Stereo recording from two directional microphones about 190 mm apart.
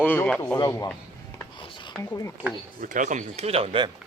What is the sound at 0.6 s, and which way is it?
Speech, 15° left (ahead or behind).